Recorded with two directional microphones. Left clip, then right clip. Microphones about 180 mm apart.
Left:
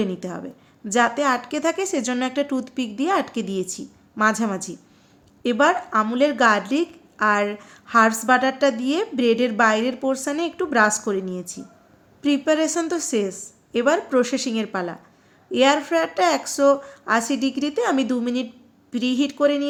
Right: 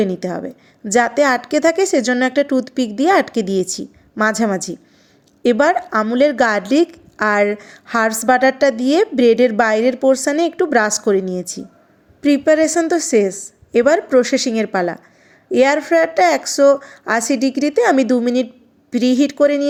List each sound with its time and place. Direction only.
0.0 s speech: 30° right (ahead or behind)